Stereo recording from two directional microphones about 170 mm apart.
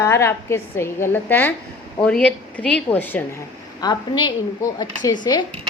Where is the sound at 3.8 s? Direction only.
25° left (ahead or behind).